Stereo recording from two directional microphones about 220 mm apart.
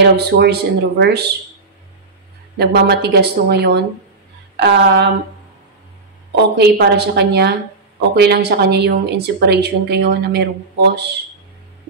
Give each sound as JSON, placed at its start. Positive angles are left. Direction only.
{"t": 0.0, "sound": "a woman's voice", "side_deg": -50}
{"t": 2.5, "sound": "a woman's voice", "side_deg": -45}
{"t": 6.5, "sound": "a woman's voice", "side_deg": -50}